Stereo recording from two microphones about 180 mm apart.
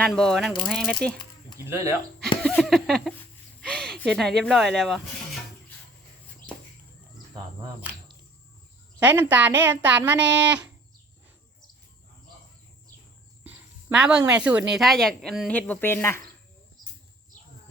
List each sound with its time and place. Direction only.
0.0 s speech: 5° left (ahead or behind)
1.5 s speech: 15° right (ahead or behind)
2.4 s a sound: centre (ahead or behind)
3.6 s speech: 5° left (ahead or behind)
9.0 s speech: 10° right (ahead or behind)
13.9 s a woman's voice: 5° right (ahead or behind); by 16.2 s 15° left (ahead or behind)